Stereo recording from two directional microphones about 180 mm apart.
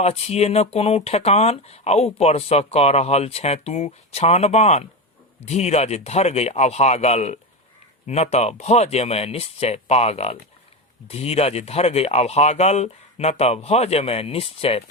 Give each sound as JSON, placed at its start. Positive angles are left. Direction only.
{"t": 0.0, "sound": "speech", "side_deg": 35}